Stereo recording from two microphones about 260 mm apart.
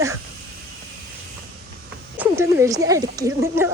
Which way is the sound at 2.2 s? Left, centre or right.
Centre.